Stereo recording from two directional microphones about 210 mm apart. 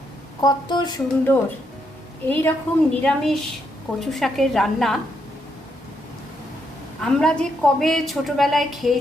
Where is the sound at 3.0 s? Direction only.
Centre (ahead or behind).